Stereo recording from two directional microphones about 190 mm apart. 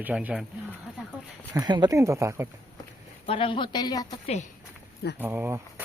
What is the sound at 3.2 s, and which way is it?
Speech, 30° left (ahead or behind).